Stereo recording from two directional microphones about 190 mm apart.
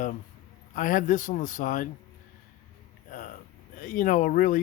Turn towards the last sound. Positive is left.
turn(degrees=45)  # may be behind; listen again after turning